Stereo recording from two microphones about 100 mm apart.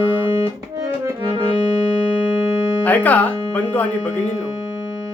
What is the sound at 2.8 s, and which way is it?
Music, 15° left (ahead or behind).